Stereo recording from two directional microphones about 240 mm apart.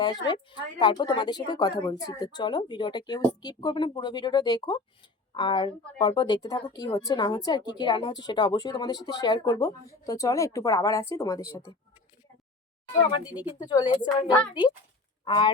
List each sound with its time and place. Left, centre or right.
0.0 s speech: centre
13.0 s speech: centre